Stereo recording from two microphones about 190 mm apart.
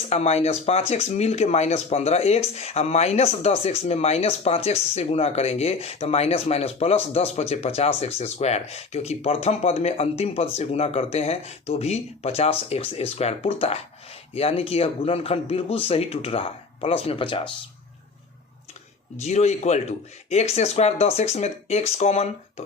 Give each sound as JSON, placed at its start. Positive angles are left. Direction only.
{"t": 0.1, "sound": "speech", "side_deg": 35}
{"t": 19.2, "sound": "speech", "side_deg": 35}